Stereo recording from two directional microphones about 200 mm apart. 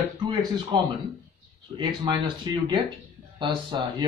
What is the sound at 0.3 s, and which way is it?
Speech, 20° right (ahead or behind).